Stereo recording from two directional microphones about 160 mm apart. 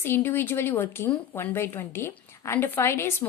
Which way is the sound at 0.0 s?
15° left (ahead or behind).